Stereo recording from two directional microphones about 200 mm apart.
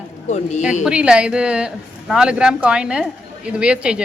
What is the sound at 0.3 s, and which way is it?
Speech, 35° left (ahead or behind).